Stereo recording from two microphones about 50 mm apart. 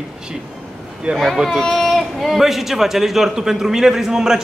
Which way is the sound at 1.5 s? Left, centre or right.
Centre.